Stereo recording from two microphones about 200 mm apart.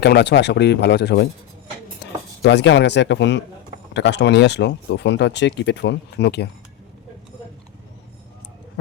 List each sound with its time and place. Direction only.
0.0 s speech: 60° left (ahead or behind)